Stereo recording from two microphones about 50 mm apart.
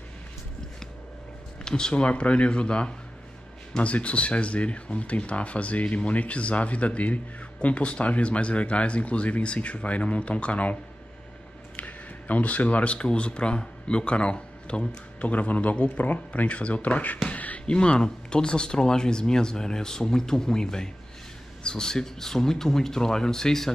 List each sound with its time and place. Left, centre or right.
1.6 s speech: centre; by 17.2 s left
17.2 s a sound: left
17.6 s speech: centre